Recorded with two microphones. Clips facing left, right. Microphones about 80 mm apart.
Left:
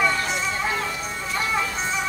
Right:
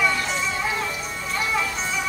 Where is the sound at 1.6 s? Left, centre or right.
Left.